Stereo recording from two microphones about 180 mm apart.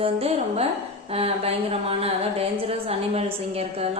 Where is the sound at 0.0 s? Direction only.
35° right (ahead or behind).